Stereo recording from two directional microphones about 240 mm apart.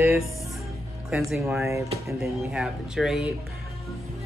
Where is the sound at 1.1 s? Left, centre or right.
Centre.